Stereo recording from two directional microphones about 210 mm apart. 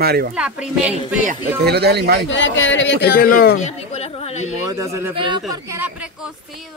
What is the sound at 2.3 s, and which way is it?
Speech, 60° left (ahead or behind).